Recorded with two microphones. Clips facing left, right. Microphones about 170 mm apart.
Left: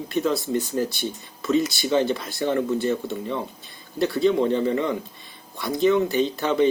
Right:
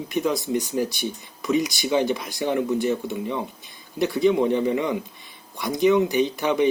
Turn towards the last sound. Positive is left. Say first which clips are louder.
# even
turn(degrees=-15)  # may be behind; listen again after turning